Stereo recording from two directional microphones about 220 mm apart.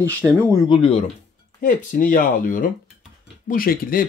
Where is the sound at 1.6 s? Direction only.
35° left (ahead or behind).